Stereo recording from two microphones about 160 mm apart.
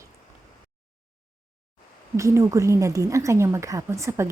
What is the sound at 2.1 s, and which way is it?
A woman's voice, 20° right (ahead or behind).